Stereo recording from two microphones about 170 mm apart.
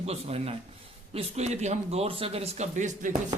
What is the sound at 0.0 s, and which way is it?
Speech, 40° right (ahead or behind).